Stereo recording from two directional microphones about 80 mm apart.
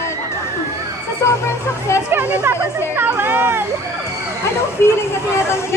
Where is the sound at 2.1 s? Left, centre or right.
Right.